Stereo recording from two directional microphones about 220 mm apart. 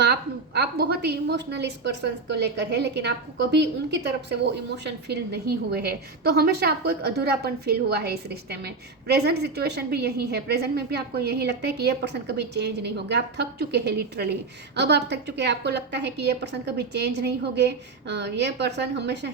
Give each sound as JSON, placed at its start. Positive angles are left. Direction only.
{"t": 0.0, "sound": "a woman's voice", "side_deg": -50}